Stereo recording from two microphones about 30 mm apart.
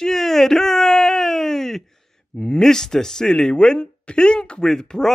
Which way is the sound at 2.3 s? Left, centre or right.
Left.